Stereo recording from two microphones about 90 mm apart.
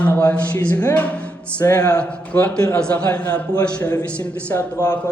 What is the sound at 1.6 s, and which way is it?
Speech, 40° left (ahead or behind).